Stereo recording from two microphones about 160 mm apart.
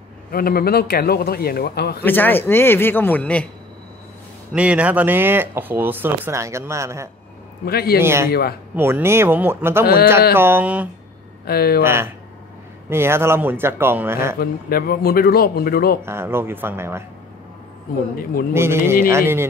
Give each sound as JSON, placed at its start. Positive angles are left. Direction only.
{"t": 0.3, "sound": "a man's voice", "side_deg": 70}
{"t": 2.0, "sound": "a man's voice", "side_deg": 10}
{"t": 4.6, "sound": "speech", "side_deg": -10}
{"t": 7.6, "sound": "a man's voice", "side_deg": 75}
{"t": 8.0, "sound": "speech", "side_deg": -15}
{"t": 8.3, "sound": "a man's voice", "side_deg": 75}
{"t": 8.7, "sound": "speech", "side_deg": -15}
{"t": 11.4, "sound": "a man's voice", "side_deg": 75}
{"t": 11.8, "sound": "speech", "side_deg": -15}
{"t": 14.4, "sound": "a man's voice", "side_deg": 70}
{"t": 16.0, "sound": "speech", "side_deg": -15}
{"t": 18.5, "sound": "speech", "side_deg": -15}